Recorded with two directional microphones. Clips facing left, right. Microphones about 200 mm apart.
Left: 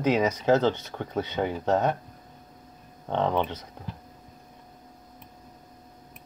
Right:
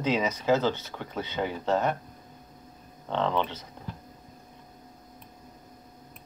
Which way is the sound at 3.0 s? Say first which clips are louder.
Left 2 dB; 15° left (ahead or behind).